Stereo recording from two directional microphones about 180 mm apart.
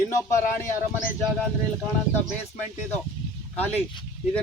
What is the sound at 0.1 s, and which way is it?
Speech, 15° left (ahead or behind).